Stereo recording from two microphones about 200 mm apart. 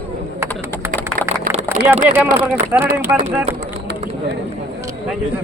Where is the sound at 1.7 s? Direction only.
30° right (ahead or behind).